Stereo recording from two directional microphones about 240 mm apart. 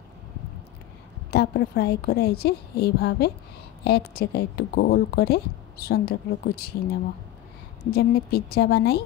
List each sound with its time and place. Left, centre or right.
1.3 s a woman's voice: left